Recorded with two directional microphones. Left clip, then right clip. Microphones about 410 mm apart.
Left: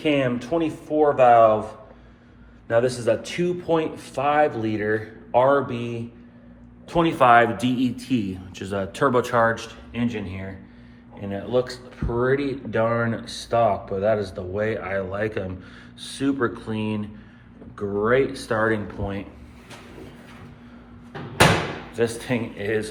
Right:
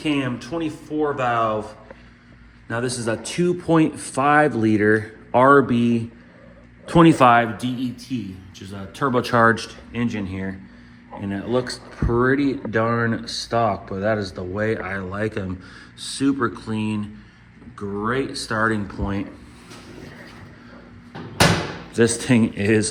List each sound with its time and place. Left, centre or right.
0.0 s speech: centre
2.6 s speech: centre
7.5 s speech: centre
21.9 s speech: right